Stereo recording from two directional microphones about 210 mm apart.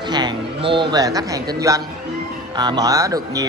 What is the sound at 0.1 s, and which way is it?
Speech, 20° right (ahead or behind).